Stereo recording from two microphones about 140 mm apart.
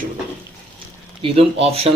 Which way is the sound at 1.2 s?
45° right (ahead or behind).